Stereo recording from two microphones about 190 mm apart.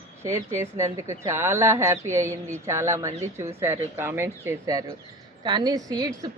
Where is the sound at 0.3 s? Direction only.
15° right (ahead or behind).